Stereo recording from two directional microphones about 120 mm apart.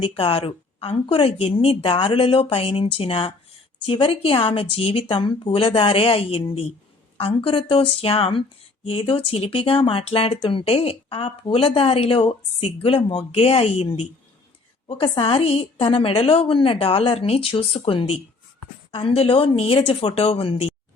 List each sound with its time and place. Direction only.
0.0 s speech: 50° left (ahead or behind)